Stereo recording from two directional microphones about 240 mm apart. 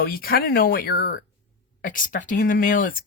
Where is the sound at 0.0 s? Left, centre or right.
Left.